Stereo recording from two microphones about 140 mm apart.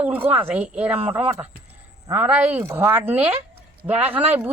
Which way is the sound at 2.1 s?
10° right (ahead or behind).